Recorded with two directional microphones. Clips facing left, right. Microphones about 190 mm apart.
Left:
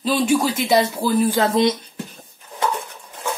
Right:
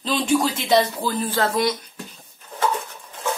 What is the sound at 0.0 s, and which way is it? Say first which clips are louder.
Speech: left 2 dB; 5° left (ahead or behind).